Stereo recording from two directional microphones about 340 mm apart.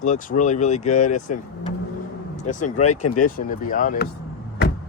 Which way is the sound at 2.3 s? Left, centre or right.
Left.